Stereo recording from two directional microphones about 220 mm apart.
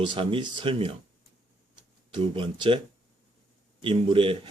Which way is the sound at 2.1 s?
20° right (ahead or behind).